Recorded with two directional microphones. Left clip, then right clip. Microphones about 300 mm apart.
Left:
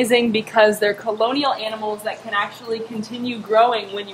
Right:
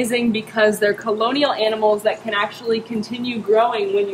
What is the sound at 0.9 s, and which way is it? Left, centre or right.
Speech, centre.